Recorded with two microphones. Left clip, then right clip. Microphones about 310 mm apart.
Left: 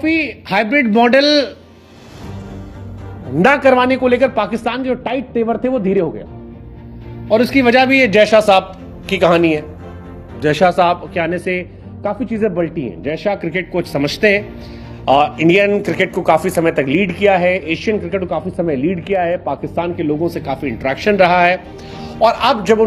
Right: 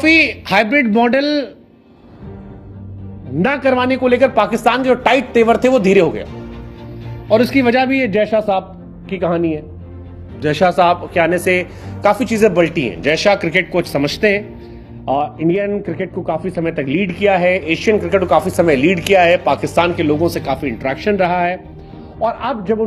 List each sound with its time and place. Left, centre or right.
0.0 s a man's voice: centre
3.3 s speech: centre; by 5.3 s right
5.3 s speech: right
7.2 s speech: centre; by 8.6 s left
9.0 s speech: left
10.4 s speech: centre; by 11.7 s right
12.0 s a man's voice: right; by 14.5 s centre
15.0 s speech: left
16.2 s a man's voice: left; by 18.8 s right
18.8 s a man's voice: right; by 21.5 s centre
22.2 s a man's voice: left